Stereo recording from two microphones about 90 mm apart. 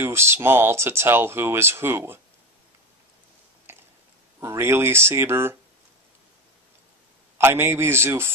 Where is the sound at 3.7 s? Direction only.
25° right (ahead or behind).